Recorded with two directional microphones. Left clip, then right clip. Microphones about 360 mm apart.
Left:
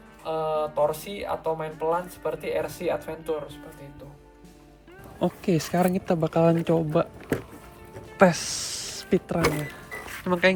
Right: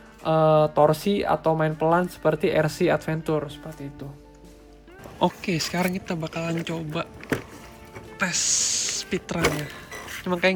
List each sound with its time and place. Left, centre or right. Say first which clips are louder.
0.3 s speech: right 8 dB; right
5.2 s speech: right 2 dB; centre